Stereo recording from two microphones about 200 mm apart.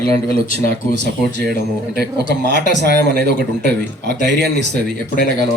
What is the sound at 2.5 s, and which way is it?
Speech, 55° right (ahead or behind).